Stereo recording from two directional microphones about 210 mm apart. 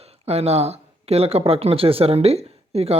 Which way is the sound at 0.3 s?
30° right (ahead or behind).